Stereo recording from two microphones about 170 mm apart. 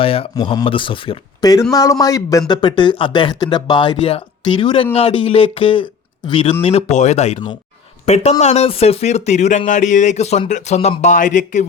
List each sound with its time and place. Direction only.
0.0 s speech: 35° left (ahead or behind)